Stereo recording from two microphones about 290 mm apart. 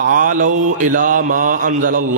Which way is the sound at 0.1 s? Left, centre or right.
Right.